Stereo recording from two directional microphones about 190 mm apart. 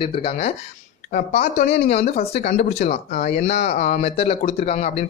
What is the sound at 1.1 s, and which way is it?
Speech, 45° left (ahead or behind).